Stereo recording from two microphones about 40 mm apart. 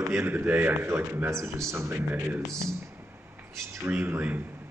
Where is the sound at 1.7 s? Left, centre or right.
Right.